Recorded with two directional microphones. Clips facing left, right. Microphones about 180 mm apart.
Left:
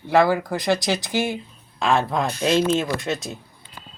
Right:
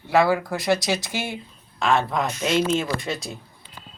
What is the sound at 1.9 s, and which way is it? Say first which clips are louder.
Speech: left 1 dB; 10° left (ahead or behind).